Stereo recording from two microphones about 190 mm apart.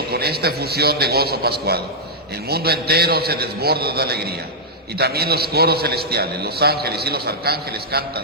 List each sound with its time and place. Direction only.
0.1 s a man's voice: 55° right (ahead or behind)